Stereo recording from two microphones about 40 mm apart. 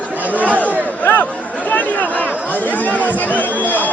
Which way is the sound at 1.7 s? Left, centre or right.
Left.